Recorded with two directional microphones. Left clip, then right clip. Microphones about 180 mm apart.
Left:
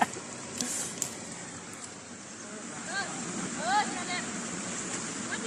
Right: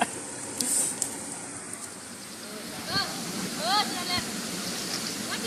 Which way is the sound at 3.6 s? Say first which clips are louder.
Right 2 dB; 45° right (ahead or behind).